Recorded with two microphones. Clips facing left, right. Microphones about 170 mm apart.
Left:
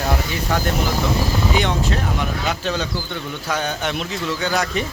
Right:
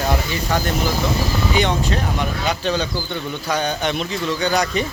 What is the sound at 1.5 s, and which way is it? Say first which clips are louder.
Speech: right 3 dB; centre (ahead or behind).